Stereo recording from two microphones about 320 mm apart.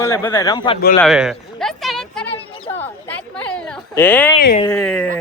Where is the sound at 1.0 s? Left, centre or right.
Centre.